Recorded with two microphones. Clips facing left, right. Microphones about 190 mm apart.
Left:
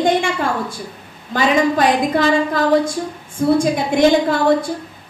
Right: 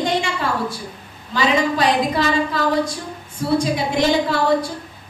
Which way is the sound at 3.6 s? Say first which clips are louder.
Left 3 dB; 50° left (ahead or behind).